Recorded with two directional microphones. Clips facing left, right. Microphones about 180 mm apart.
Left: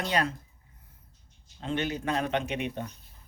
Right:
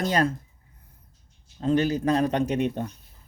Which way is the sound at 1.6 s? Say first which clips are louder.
Right 8 dB; 40° right (ahead or behind).